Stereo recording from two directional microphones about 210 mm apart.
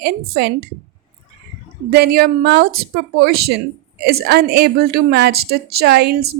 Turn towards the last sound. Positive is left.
turn(degrees=-50)  # may be behind; listen again after turning